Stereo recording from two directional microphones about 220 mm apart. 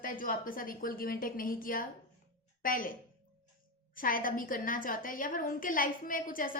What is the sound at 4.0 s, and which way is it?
A woman's voice, 40° left (ahead or behind).